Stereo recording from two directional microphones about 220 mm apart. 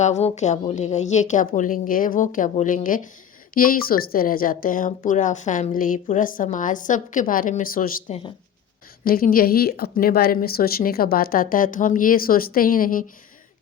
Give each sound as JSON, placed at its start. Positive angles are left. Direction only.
{"t": 0.0, "sound": "speech", "side_deg": 30}